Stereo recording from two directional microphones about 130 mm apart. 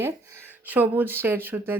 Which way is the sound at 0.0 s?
20° right (ahead or behind).